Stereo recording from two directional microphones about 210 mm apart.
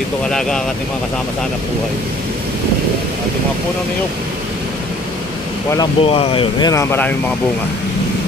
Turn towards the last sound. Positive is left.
turn(degrees=10)  # may be behind; listen again after turning